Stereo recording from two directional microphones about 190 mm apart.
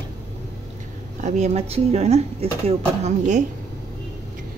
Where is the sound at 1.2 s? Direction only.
40° right (ahead or behind).